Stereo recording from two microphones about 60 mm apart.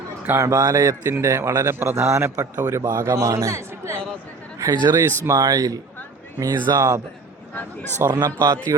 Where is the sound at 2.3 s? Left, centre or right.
Right.